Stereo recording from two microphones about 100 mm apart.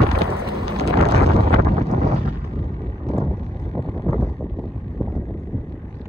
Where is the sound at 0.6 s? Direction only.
90° right.